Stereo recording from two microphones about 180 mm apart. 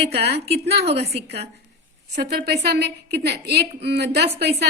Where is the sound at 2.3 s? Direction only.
65° right (ahead or behind).